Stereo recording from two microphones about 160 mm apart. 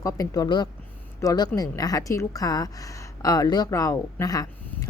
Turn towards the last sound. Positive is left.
turn(degrees=20)  # may be behind; listen again after turning